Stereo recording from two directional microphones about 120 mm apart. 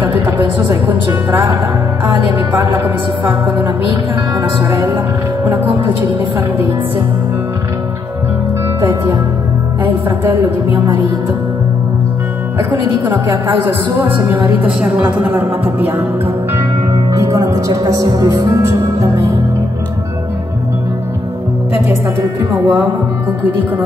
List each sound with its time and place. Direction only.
0.0 s a woman's voice: 15° right (ahead or behind)
2.3 s a woman's voice: 15° right (ahead or behind)
3.6 s music: 40° right (ahead or behind)
4.6 s a woman's voice: 15° right (ahead or behind)
10.0 s music: 40° right (ahead or behind)
13.3 s a man's voice: 20° right (ahead or behind)
17.1 s speech: 25° right (ahead or behind)
22.5 s a woman's voice: 15° right (ahead or behind)